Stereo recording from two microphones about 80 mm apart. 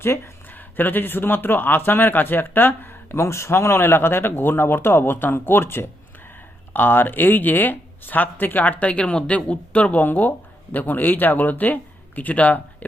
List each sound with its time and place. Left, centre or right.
0.0 s speech: left